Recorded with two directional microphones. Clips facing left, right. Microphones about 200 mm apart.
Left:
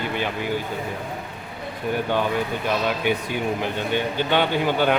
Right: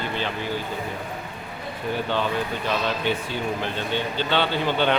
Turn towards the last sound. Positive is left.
turn(degrees=10)  # may be behind; listen again after turning